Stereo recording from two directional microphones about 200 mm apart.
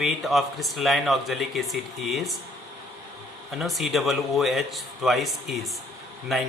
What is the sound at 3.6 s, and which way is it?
A man's voice, centre (ahead or behind).